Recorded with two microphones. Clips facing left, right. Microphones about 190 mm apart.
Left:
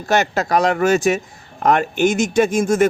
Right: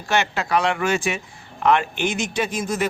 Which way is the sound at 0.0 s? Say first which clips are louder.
Left 5 dB; 40° left (ahead or behind).